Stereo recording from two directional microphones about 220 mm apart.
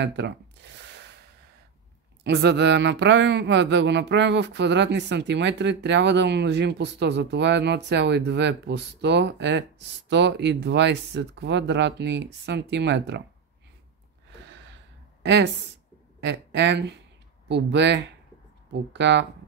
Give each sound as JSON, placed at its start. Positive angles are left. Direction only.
{"t": 0.0, "sound": "a sound", "side_deg": -50}
{"t": 2.2, "sound": "speech", "side_deg": -50}
{"t": 16.2, "sound": "speech", "side_deg": -55}